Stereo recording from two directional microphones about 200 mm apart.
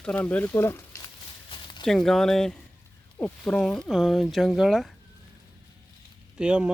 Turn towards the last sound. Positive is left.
turn(degrees=-5)  # may be behind; listen again after turning